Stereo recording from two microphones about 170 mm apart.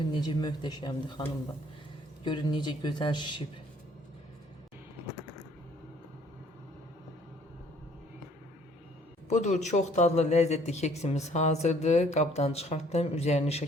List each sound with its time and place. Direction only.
0.2 s speech: 25° left (ahead or behind)
2.2 s speech: 25° left (ahead or behind)
9.3 s speech: 45° left (ahead or behind)